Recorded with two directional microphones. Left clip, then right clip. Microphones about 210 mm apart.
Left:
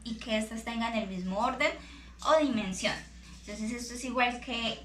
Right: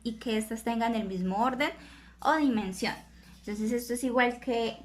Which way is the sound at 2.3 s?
55° right (ahead or behind).